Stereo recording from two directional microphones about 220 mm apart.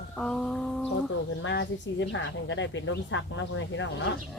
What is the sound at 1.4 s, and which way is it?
A woman's voice, 55° left (ahead or behind).